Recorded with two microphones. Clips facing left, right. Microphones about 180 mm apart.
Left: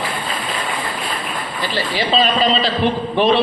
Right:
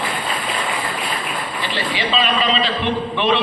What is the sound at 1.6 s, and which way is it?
A man's voice, 40° left (ahead or behind).